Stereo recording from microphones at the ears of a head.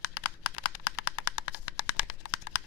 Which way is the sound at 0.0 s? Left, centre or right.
Left.